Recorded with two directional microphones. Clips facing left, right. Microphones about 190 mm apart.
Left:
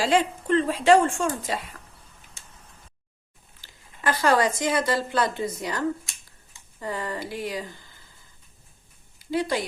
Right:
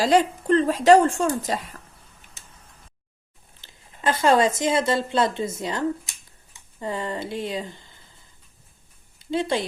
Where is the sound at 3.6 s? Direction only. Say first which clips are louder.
Right 1 dB; 25° right (ahead or behind).